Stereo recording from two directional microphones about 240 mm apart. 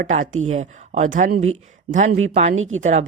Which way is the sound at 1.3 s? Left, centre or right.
Right.